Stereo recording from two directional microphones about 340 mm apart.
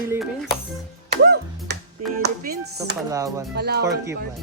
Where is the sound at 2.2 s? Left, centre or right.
Right.